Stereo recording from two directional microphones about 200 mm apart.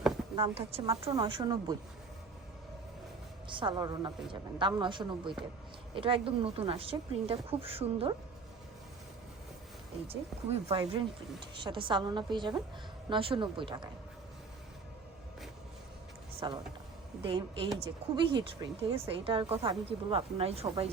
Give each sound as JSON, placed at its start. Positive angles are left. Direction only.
{"t": 0.3, "sound": "speech", "side_deg": -30}
{"t": 3.5, "sound": "speech", "side_deg": -25}
{"t": 10.1, "sound": "speech", "side_deg": -30}
{"t": 16.4, "sound": "speech", "side_deg": -20}